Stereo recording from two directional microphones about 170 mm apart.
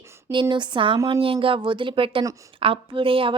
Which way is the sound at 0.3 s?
25° right (ahead or behind).